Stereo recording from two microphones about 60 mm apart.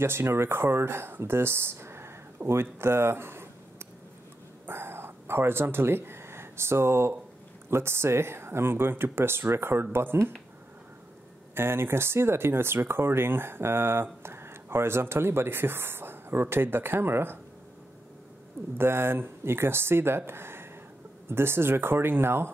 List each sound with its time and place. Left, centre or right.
0.0 s speech: right
4.6 s a sound: right
7.7 s speech: right
11.5 s speech: right
18.8 s speech: right